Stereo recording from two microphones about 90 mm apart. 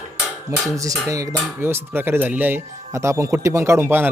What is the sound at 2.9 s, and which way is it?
Speech, 35° right (ahead or behind).